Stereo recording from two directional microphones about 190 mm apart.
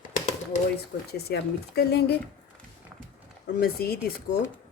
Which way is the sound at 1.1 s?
55° left (ahead or behind).